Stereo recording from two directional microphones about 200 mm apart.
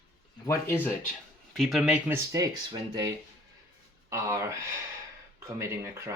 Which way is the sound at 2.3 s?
20° right (ahead or behind).